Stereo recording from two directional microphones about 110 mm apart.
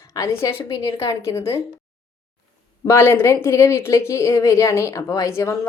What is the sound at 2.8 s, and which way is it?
Speech, 20° left (ahead or behind).